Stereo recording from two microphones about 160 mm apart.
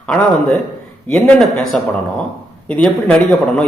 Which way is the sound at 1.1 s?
5° left (ahead or behind).